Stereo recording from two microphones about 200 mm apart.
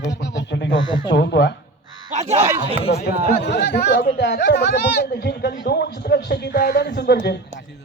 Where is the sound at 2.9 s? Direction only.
50° left (ahead or behind).